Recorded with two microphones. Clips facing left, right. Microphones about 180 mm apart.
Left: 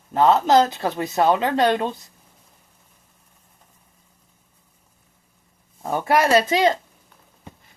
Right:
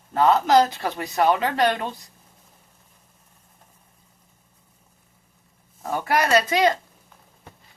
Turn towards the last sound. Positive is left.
turn(degrees=25)  # may be behind; listen again after turning